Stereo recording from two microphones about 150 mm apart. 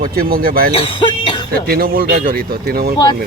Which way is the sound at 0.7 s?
40° left (ahead or behind).